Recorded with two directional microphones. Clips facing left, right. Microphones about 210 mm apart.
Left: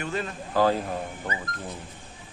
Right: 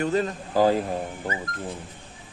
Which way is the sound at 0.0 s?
35° right (ahead or behind).